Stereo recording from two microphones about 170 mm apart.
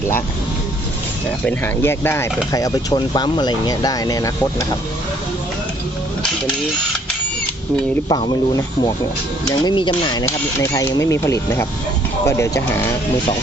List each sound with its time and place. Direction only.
1.5 s speech: 15° left (ahead or behind)
8.1 s speech: 25° left (ahead or behind)